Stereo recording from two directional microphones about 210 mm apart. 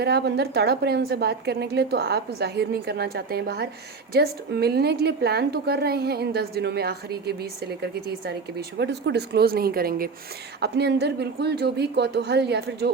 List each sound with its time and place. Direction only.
0.0 s a woman's voice: 50° right (ahead or behind)